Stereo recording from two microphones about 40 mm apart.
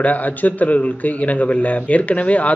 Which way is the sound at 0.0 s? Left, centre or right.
Left.